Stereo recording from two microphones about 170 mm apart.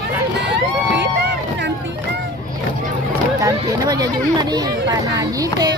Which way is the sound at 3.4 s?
25° right (ahead or behind).